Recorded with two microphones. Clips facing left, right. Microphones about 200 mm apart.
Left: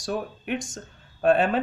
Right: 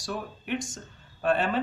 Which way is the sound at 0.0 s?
45° left (ahead or behind).